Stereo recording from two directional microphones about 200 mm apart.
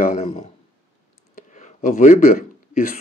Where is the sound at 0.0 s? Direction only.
40° left (ahead or behind).